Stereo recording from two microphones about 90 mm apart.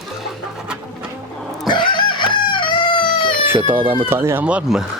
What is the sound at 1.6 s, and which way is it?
Chicken, 60° left (ahead or behind).